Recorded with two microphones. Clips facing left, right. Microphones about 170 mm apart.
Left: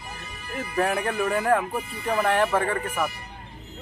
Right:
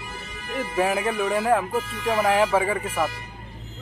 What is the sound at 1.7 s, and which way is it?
Speech, 90° right.